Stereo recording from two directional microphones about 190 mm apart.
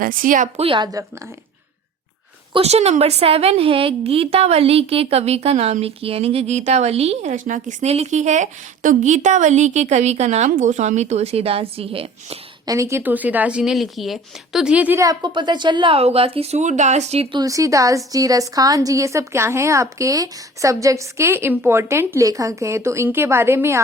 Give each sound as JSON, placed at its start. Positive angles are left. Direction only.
{"t": 0.0, "sound": "a woman's voice", "side_deg": -45}
{"t": 0.6, "sound": "speech", "side_deg": -25}
{"t": 2.5, "sound": "a woman's voice", "side_deg": -30}
{"t": 12.7, "sound": "speech", "side_deg": -15}
{"t": 17.4, "sound": "a woman's voice", "side_deg": -15}